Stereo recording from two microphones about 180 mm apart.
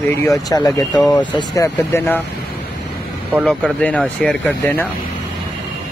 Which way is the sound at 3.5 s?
5° left (ahead or behind).